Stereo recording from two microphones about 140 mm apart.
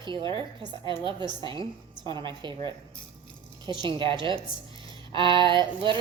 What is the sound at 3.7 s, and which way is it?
Speech, 35° right (ahead or behind).